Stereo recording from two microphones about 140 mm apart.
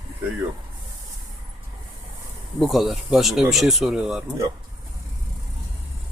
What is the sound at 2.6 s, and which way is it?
Speech, centre (ahead or behind).